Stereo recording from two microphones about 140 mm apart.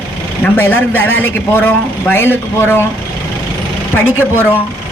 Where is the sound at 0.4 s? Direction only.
15° left (ahead or behind).